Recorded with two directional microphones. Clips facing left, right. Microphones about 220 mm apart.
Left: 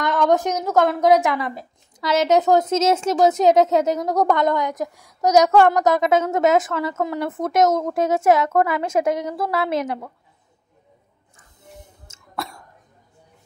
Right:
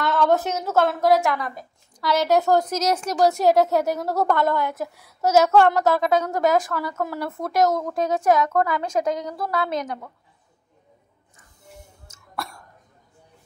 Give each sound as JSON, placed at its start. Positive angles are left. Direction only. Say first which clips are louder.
{"t": 0.0, "sound": "a sound", "louder": "left 2 dB", "side_deg": 15}
{"t": 0.7, "sound": "a woman's voice", "louder": "left 3 dB", "side_deg": 15}
{"t": 8.9, "sound": "a woman's voice", "louder": "left 5 dB", "side_deg": 5}
{"t": 11.6, "sound": "throat clearing", "louder": "left 2 dB", "side_deg": 20}